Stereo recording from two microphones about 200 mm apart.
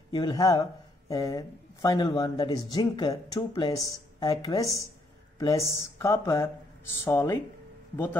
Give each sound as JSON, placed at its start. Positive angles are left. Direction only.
{"t": 0.1, "sound": "a man's voice", "side_deg": 20}